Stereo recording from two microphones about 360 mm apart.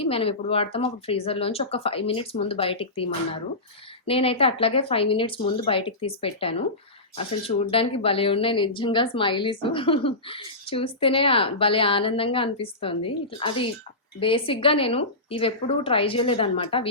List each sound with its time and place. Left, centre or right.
0.0 s speech: centre